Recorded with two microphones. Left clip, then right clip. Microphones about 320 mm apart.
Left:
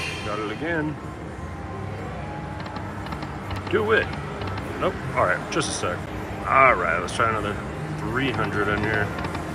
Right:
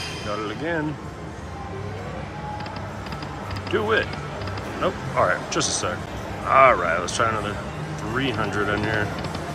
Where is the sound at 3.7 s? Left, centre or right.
Centre.